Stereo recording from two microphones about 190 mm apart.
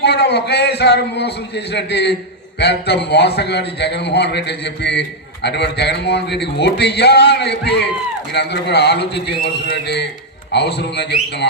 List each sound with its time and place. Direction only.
0.0 s a man's voice: 60° left (ahead or behind)